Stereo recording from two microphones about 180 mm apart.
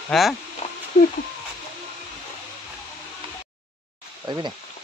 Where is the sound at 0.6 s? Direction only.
35° left (ahead or behind).